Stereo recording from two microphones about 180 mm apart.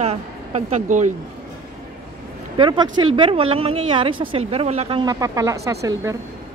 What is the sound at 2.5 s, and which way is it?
Speech, 25° right (ahead or behind).